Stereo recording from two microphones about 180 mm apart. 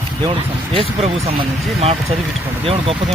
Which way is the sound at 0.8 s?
35° right (ahead or behind).